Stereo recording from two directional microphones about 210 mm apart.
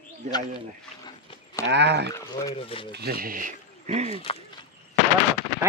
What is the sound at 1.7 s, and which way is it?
Speech, 55° right (ahead or behind).